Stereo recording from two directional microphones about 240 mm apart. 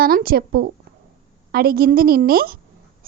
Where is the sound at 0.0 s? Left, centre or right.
Right.